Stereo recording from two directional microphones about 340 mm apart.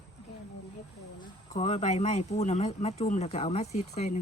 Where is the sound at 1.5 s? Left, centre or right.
Centre.